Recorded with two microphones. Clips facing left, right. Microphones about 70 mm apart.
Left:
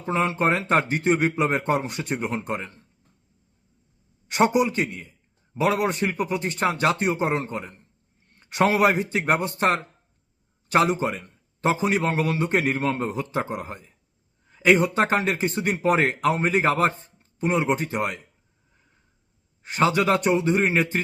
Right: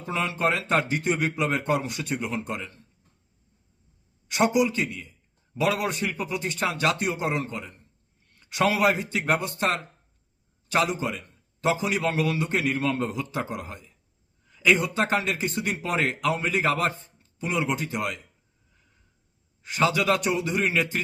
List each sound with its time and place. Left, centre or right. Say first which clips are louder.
0.0 s a man's voice: left 3 dB; left
4.3 s a man's voice: left 2 dB; left
14.4 s a sound: left 4 dB; left
15.0 s a man's voice: left 3 dB; left
19.6 s a man's voice: left 2 dB; left